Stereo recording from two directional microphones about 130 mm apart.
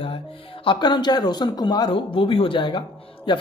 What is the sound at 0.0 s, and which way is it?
Speech, 45° left (ahead or behind).